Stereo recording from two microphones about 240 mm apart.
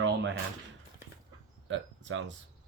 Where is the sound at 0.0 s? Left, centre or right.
Right.